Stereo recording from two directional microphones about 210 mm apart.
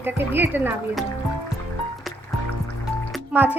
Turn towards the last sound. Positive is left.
turn(degrees=-10)  # may be behind; listen again after turning